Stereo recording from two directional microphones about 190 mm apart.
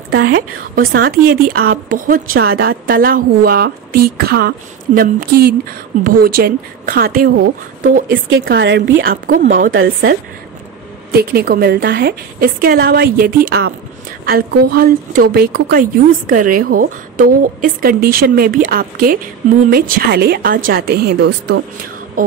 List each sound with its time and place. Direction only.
0.7 s a woman's voice: 55° right (ahead or behind)
8.5 s a woman's voice: 65° right (ahead or behind)
9.1 s a woman's voice: 45° right (ahead or behind)
9.7 s speech: 90° right
11.1 s a woman's voice: 55° right (ahead or behind)